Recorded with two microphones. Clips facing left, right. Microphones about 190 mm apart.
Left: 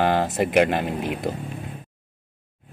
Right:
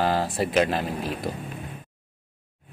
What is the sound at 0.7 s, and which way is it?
Mantra, 20° left (ahead or behind).